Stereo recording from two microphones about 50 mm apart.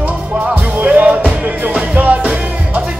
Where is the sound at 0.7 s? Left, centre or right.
Right.